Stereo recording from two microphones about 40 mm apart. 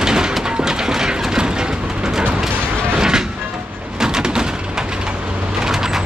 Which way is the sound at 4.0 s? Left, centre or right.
Centre.